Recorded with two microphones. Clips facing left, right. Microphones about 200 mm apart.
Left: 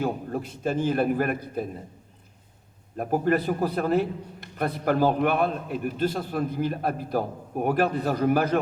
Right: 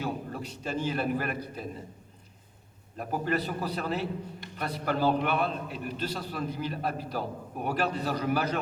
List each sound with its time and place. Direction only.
0.0 s a man's voice: 50° left (ahead or behind)
3.0 s a man's voice: 50° left (ahead or behind)